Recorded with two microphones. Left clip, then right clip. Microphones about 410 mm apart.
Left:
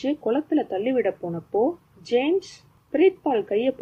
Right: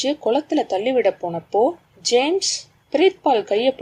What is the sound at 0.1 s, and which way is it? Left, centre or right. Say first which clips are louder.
Speech: right 2 dB; centre.